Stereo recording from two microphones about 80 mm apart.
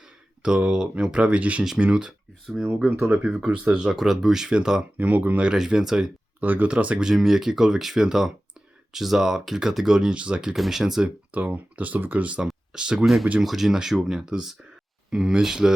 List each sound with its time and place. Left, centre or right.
0.0 s speech: centre
2.6 s speech: right; by 6.1 s centre
6.4 s speech: centre
10.5 s speech: centre
11.3 s speech: centre